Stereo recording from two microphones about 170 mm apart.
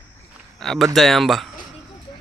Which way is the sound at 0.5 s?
5° left (ahead or behind).